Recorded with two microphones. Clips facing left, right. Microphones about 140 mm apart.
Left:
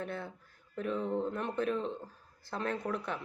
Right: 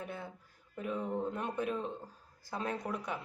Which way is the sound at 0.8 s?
10° right (ahead or behind).